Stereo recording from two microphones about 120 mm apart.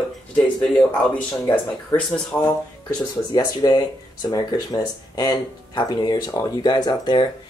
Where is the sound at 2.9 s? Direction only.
35° left (ahead or behind).